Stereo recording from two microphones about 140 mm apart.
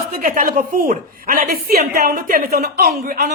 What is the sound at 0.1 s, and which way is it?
A woman's voice, 90° right.